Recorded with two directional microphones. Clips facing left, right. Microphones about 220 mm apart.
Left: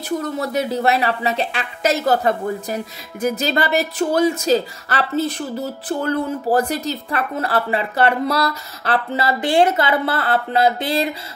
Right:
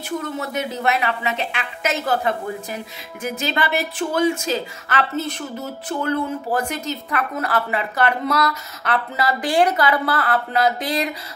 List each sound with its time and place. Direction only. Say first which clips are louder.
0.2 s a woman's voice: left 4 dB; 35° left (ahead or behind)